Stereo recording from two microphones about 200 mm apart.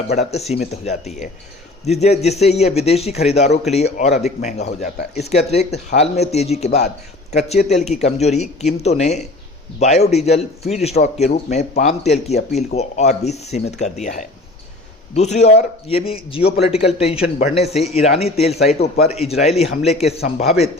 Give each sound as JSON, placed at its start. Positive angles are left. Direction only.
{"t": 0.1, "sound": "speech", "side_deg": 35}
{"t": 7.7, "sound": "a man's voice", "side_deg": 35}